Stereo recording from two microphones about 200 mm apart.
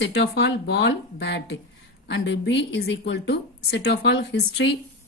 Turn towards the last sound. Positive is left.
turn(degrees=60)  # may be behind; listen again after turning